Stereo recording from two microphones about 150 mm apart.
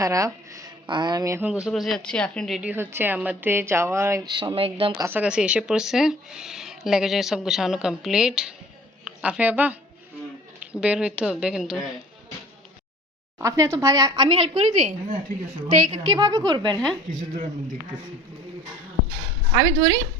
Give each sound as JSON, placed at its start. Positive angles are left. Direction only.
{"t": 0.0, "sound": "a woman's voice", "side_deg": -20}
{"t": 0.5, "sound": "a sound", "side_deg": -25}
{"t": 1.5, "sound": "speech", "side_deg": -5}
{"t": 2.6, "sound": "a woman's voice", "side_deg": -10}
{"t": 4.9, "sound": "a woman's voice", "side_deg": -15}
{"t": 10.8, "sound": "speech", "side_deg": -5}
{"t": 13.4, "sound": "a woman's voice", "side_deg": -20}
{"t": 14.3, "sound": "a woman's voice", "side_deg": -35}
{"t": 17.1, "sound": "speech", "side_deg": -60}
{"t": 19.5, "sound": "a woman's voice", "side_deg": -30}